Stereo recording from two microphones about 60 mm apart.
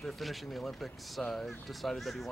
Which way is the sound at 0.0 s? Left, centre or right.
Centre.